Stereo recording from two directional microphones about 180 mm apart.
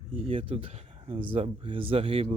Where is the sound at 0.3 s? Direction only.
30° right (ahead or behind).